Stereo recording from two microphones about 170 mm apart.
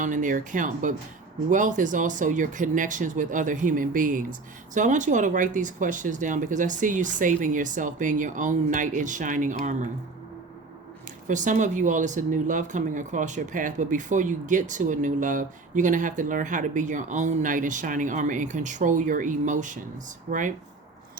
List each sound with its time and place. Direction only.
0.0 s speech: 50° right (ahead or behind)
11.3 s speech: 45° right (ahead or behind)